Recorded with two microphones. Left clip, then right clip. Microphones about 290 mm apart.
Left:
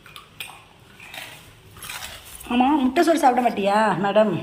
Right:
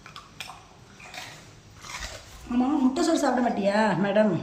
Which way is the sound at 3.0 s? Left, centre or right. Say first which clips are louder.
Left 9 dB; centre.